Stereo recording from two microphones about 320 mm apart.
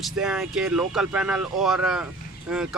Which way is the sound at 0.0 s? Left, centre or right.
Centre.